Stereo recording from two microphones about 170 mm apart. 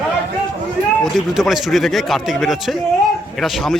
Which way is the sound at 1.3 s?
Centre (ahead or behind).